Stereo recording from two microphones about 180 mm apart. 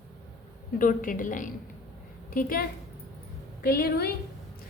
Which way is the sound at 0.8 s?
50° left (ahead or behind).